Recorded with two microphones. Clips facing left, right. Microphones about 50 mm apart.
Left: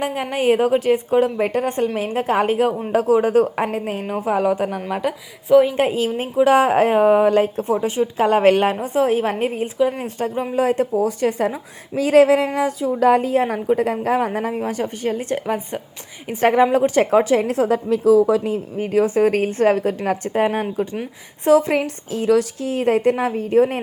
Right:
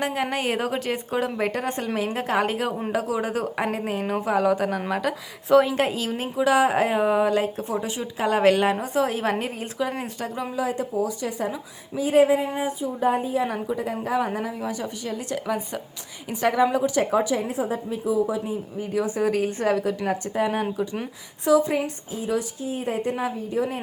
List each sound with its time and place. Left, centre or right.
0.0 s a woman's voice: centre
2.9 s speech: left
4.2 s a woman's voice: left
5.7 s a woman's voice: left
10.2 s speech: left
10.5 s a woman's voice: left
11.9 s speech: left
13.4 s a woman's voice: left
16.3 s a woman's voice: left
18.8 s a woman's voice: left